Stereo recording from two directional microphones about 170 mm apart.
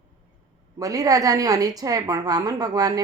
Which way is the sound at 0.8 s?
20° right (ahead or behind).